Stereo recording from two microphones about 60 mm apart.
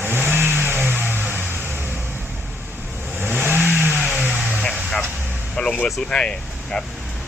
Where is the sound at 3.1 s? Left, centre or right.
Right.